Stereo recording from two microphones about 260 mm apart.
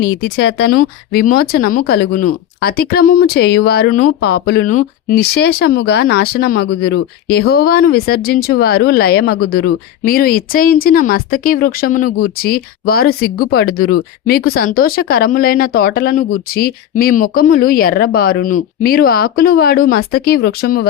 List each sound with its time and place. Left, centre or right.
0.0 s speech: left